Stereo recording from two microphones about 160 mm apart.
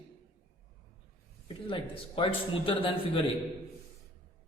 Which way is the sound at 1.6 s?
35° left (ahead or behind).